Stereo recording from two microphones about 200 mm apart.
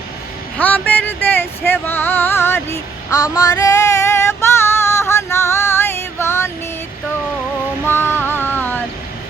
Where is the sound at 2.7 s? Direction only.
15° left (ahead or behind).